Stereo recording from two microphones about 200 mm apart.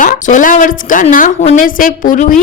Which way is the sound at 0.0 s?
40° left (ahead or behind).